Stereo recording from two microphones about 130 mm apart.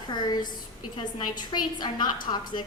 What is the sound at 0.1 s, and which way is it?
A woman's voice, 35° left (ahead or behind).